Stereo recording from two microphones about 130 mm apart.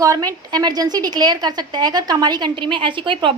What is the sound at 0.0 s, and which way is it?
A woman's voice, 30° right (ahead or behind).